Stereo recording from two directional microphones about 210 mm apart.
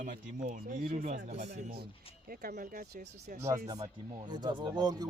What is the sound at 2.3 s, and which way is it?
Speech, 45° right (ahead or behind).